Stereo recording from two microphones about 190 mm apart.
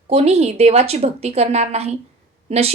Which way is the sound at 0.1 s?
35° right (ahead or behind).